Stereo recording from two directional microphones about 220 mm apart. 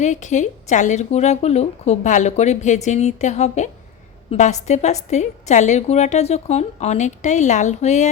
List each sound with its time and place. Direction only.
0.0 s a woman's voice: 35° left (ahead or behind)